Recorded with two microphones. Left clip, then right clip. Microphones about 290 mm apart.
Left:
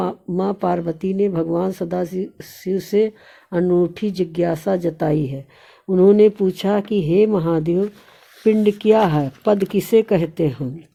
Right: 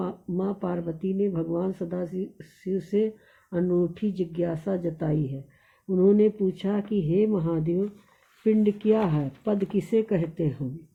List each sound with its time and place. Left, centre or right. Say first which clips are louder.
0.0 s speech: left 9 dB; left